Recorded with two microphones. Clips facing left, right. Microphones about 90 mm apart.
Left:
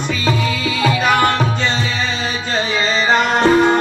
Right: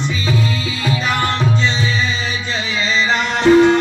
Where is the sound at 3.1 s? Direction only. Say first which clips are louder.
Right 2 dB; 40° left (ahead or behind).